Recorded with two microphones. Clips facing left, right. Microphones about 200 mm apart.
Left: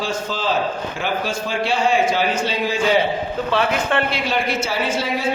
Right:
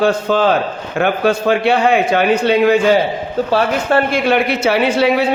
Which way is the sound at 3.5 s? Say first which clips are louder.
Right 5 dB; 40° right (ahead or behind).